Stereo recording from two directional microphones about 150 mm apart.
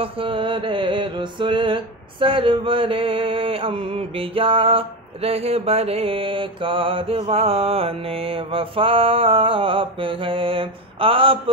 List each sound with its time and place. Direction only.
0.0 s mantra: 35° right (ahead or behind)